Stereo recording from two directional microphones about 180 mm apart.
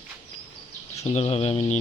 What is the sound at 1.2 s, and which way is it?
Speech, 35° left (ahead or behind).